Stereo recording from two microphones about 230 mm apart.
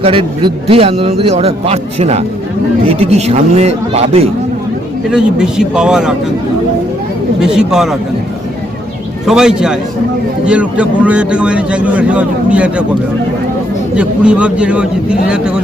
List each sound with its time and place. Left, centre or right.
0.0 s a man's voice: right
5.0 s a man's voice: centre
7.3 s a man's voice: centre
9.2 s a man's voice: centre
13.9 s a man's voice: centre